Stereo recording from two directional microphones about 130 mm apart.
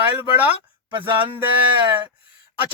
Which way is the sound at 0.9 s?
40° right (ahead or behind).